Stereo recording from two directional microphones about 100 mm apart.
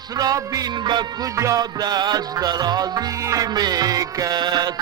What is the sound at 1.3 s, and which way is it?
Music, 35° right (ahead or behind).